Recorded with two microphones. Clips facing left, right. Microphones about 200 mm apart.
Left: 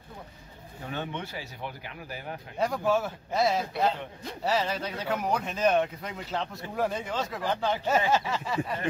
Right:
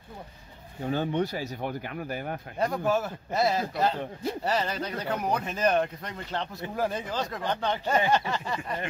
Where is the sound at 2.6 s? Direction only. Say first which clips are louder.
Even; centre (ahead or behind).